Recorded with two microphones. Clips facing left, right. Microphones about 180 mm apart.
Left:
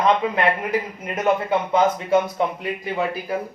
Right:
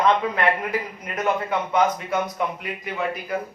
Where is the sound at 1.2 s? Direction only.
25° left (ahead or behind).